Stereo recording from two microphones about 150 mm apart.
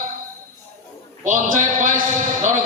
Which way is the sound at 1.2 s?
60° right (ahead or behind).